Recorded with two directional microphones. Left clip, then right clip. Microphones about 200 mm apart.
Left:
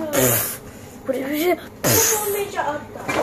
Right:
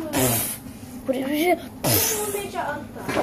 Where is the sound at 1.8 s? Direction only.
10° left (ahead or behind).